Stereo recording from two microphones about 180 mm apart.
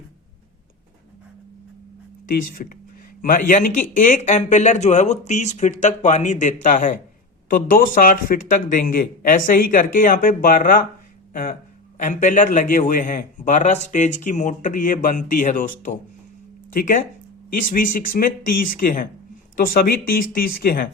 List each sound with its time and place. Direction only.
2.3 s a man's voice: 50° left (ahead or behind)
11.9 s a man's voice: 45° left (ahead or behind)